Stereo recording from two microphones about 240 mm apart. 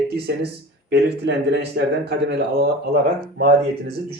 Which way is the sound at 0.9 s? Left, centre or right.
Right.